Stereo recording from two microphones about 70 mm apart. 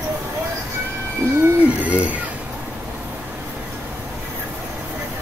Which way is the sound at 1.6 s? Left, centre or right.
Right.